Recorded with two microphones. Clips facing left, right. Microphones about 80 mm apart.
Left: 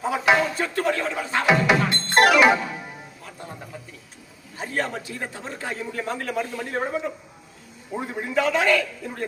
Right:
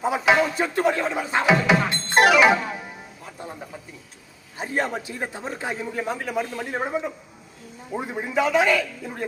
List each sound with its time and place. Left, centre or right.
0.5 s a man's voice: centre
1.5 s music: centre
3.2 s music: centre
4.5 s a man's voice: centre